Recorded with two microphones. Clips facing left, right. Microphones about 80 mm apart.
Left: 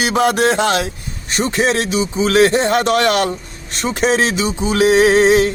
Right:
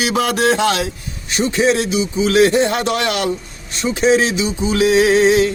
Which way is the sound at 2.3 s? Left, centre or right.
Left.